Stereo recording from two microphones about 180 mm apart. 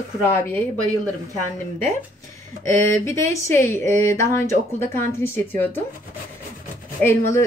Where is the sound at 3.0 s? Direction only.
15° left (ahead or behind).